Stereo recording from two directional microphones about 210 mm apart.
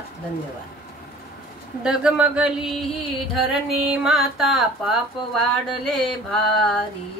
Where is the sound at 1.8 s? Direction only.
5° right (ahead or behind).